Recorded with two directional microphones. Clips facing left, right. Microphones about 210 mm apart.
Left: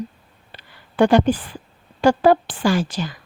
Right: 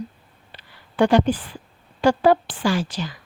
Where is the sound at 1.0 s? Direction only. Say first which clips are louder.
Left 2 dB; 50° left (ahead or behind).